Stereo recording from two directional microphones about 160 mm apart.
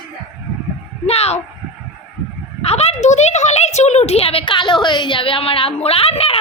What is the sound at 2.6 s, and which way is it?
A woman's voice, 40° left (ahead or behind).